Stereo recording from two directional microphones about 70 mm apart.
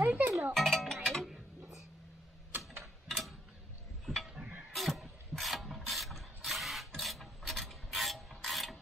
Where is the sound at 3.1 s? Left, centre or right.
Centre.